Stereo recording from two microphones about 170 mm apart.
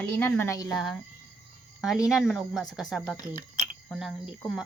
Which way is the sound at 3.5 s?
45° right (ahead or behind).